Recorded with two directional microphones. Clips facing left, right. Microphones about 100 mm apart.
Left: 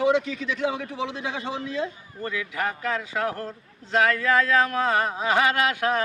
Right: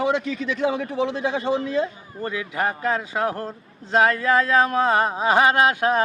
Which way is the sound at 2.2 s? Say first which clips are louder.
Right 3 dB; 30° right (ahead or behind).